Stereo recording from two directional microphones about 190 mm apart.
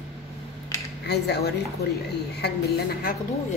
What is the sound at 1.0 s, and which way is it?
A man's voice, 60° left (ahead or behind).